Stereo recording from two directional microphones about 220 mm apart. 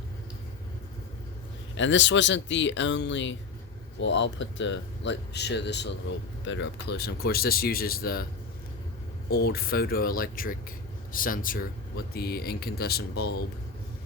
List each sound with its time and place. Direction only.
1.7 s speech: 55° left (ahead or behind)
9.3 s speech: 45° left (ahead or behind)